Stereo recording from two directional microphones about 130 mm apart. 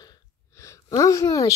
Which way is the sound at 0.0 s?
25° left (ahead or behind).